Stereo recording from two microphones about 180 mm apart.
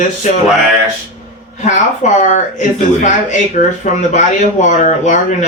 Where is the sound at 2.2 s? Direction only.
45° left (ahead or behind).